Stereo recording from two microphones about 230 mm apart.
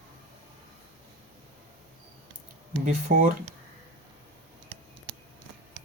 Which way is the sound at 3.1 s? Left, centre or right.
Right.